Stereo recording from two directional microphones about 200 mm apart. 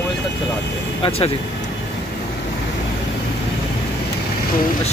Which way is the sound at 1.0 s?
30° left (ahead or behind).